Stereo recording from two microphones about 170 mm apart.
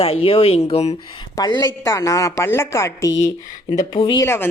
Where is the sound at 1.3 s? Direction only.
20° left (ahead or behind).